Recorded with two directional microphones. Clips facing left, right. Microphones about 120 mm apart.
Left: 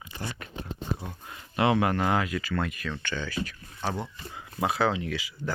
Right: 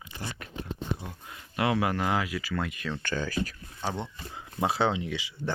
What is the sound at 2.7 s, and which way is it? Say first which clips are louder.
Speech: right 1 dB; 25° right (ahead or behind).